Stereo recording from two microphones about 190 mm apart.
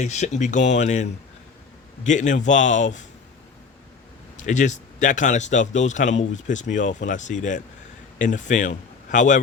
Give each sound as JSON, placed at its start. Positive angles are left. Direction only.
{"t": 0.0, "sound": "a man's voice", "side_deg": 35}
{"t": 2.0, "sound": "a man's voice", "side_deg": 40}
{"t": 4.4, "sound": "a man's voice", "side_deg": 40}